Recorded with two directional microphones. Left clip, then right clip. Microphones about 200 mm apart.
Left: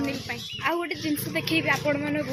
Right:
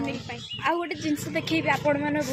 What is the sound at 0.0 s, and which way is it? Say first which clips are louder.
Bird: left 2 dB; 15° left (ahead or behind).